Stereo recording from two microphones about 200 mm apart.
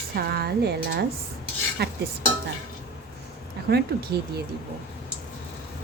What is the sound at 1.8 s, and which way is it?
Cutlery, 55° right (ahead or behind).